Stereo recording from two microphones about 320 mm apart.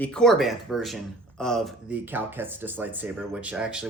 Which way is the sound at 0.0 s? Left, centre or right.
Centre.